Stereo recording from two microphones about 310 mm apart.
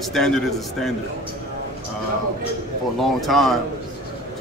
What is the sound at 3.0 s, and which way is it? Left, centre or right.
Speech, centre.